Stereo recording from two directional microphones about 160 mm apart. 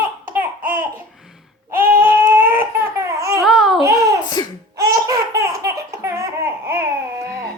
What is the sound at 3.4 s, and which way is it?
Babbling, centre (ahead or behind).